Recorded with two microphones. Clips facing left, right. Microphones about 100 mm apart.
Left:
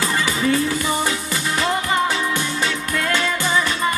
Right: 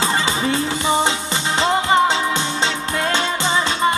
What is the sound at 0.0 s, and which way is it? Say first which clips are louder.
Music: right 1 dB; 25° right (ahead or behind).